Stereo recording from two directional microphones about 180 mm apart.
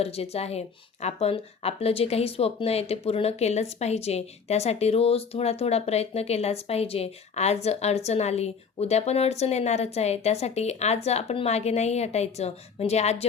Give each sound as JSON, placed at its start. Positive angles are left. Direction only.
{"t": 0.0, "sound": "speech", "side_deg": 35}